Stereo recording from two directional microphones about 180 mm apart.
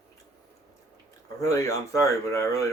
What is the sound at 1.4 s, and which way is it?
Speech, 15° left (ahead or behind).